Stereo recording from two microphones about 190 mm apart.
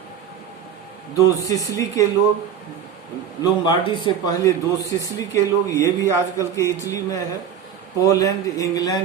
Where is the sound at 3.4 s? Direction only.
25° left (ahead or behind).